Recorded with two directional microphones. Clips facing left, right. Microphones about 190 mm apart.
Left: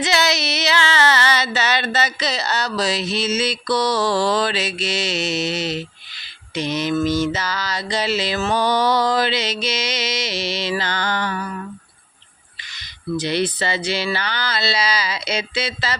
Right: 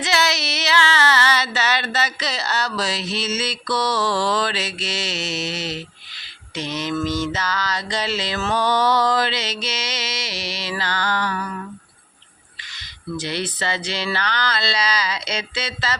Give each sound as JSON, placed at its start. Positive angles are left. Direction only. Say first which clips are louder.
{"t": 0.0, "sound": "a sound", "louder": "left 2 dB", "side_deg": 20}
{"t": 6.5, "sound": "mantra", "louder": "left 4 dB", "side_deg": 15}
{"t": 12.7, "sound": "mantra", "louder": "left 5 dB", "side_deg": 15}